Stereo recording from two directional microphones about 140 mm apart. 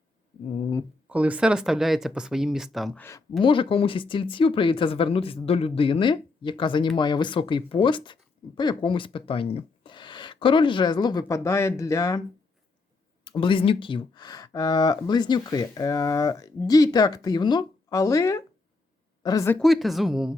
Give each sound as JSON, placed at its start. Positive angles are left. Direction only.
{"t": 1.0, "sound": "speech", "side_deg": -10}
{"t": 3.0, "sound": "speech", "side_deg": 20}
{"t": 3.4, "sound": "speech", "side_deg": 35}
{"t": 13.2, "sound": "speech", "side_deg": 35}
{"t": 19.5, "sound": "speech", "side_deg": 0}